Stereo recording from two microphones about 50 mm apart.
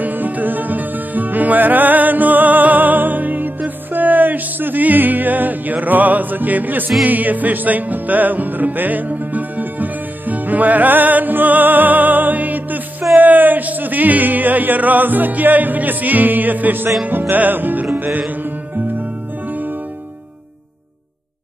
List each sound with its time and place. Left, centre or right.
0.0 s music: right
13.2 s speech: right
17.3 s music: right